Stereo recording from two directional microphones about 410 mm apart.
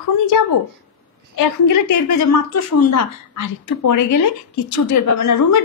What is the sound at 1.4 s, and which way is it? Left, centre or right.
A woman's voice, left.